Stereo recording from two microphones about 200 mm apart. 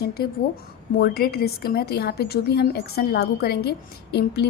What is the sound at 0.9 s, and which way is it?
A woman's voice, 50° left (ahead or behind).